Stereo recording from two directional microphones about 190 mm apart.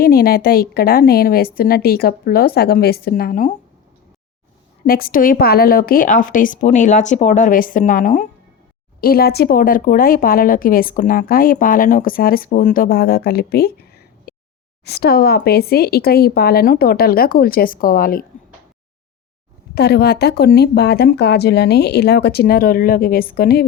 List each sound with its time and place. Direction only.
0.0 s speech: 50° left (ahead or behind)
4.9 s speech: 50° left (ahead or behind)
9.0 s speech: 50° left (ahead or behind)
19.7 s speech: 60° left (ahead or behind)